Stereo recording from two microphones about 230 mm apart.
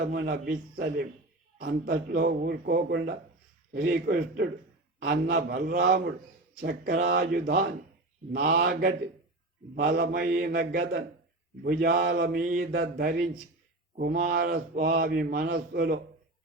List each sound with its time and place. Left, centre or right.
0.0 s speech: right
12.4 s mantra: right
13.9 s speech: right